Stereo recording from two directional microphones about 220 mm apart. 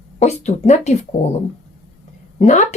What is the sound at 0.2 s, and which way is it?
Speech, 30° left (ahead or behind).